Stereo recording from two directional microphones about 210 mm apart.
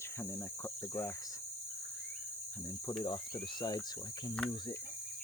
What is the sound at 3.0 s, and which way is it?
Speech, 20° left (ahead or behind).